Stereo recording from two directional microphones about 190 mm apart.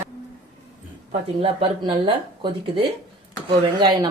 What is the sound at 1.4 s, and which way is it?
Speech, 30° right (ahead or behind).